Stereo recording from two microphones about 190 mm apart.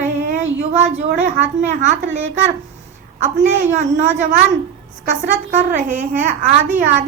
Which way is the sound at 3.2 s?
40° right (ahead or behind).